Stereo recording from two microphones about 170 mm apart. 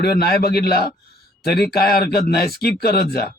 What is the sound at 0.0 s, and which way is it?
A man's voice, 65° left (ahead or behind).